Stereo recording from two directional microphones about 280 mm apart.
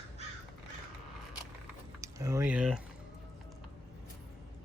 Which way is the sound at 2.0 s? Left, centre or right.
Centre.